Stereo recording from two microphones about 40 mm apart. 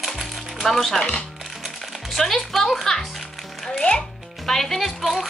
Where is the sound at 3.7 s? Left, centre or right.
Left.